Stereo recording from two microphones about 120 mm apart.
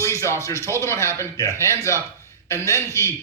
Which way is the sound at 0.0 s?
25° left (ahead or behind).